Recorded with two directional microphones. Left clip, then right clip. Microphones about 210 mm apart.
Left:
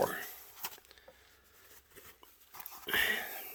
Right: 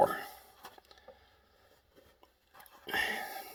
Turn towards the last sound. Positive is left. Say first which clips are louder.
# left 2 dB
turn(degrees=20)  # may be behind; listen again after turning